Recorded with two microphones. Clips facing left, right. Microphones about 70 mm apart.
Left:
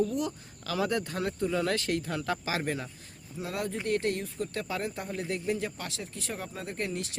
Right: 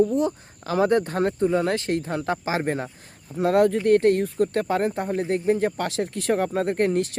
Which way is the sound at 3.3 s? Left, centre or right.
Right.